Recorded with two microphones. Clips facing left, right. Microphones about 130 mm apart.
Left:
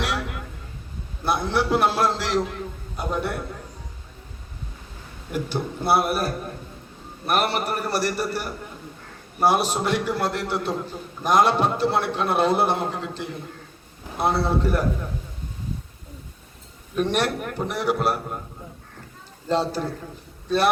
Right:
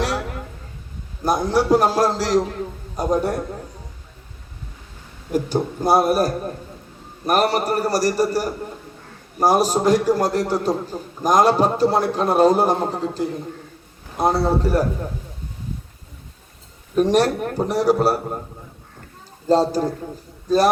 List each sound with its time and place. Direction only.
0.0 s a sound: 35° right (ahead or behind)
1.2 s a man's voice: 40° right (ahead or behind)
5.3 s a man's voice: 40° right (ahead or behind)
16.9 s a man's voice: 35° right (ahead or behind)
19.5 s a man's voice: 40° right (ahead or behind)